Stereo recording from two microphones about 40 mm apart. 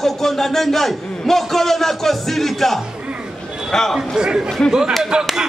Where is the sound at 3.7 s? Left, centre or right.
Centre.